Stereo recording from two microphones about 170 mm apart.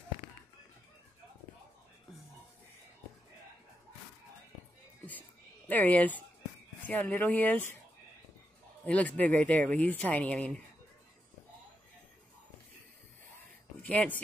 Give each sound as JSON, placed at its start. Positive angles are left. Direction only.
{"t": 5.7, "sound": "speech", "side_deg": 10}
{"t": 8.8, "sound": "speech", "side_deg": 10}
{"t": 13.8, "sound": "speech", "side_deg": 10}